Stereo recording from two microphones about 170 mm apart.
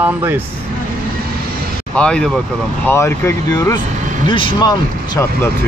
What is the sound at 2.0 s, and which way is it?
Speech, 5° left (ahead or behind).